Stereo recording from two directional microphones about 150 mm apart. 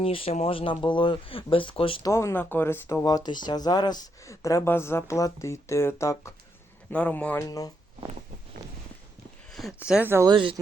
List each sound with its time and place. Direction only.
0.0 s speech: 40° left (ahead or behind)
2.0 s a man's voice: 20° left (ahead or behind)
7.4 s speech: 25° left (ahead or behind)
9.5 s speech: centre (ahead or behind)
10.2 s speech: 35° right (ahead or behind)